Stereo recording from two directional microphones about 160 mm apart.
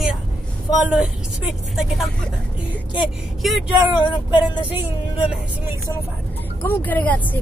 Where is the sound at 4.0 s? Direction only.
30° left (ahead or behind).